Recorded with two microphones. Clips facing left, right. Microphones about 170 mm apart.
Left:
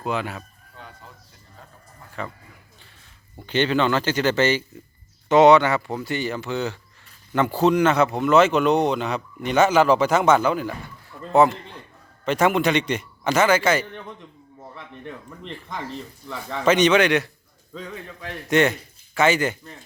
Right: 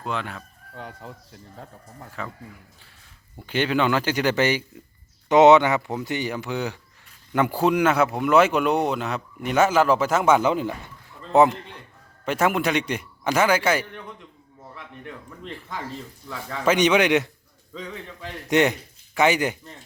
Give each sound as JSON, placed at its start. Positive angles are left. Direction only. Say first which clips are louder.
{"t": 0.0, "sound": "speech", "louder": "left 3 dB", "side_deg": 5}
{"t": 0.8, "sound": "speech", "louder": "right 6 dB", "side_deg": -70}
{"t": 2.2, "sound": "speech", "louder": "left 2 dB", "side_deg": -5}
{"t": 3.3, "sound": "speech", "louder": "left 2 dB", "side_deg": -5}
{"t": 10.4, "sound": "a man's voice", "louder": "even", "side_deg": -20}
{"t": 12.2, "sound": "speech", "louder": "left 3 dB", "side_deg": -5}
{"t": 16.2, "sound": "speech", "louder": "left 2 dB", "side_deg": -5}
{"t": 18.4, "sound": "speech", "louder": "left 1 dB", "side_deg": -15}